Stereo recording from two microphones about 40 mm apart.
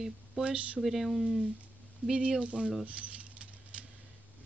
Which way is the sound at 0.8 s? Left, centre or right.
Centre.